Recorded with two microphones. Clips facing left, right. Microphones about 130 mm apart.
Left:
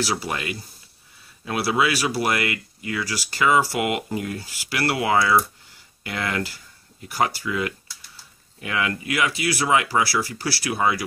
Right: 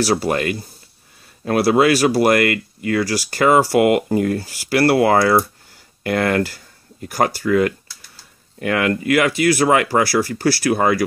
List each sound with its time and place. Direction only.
0.0 s speech: 45° right (ahead or behind)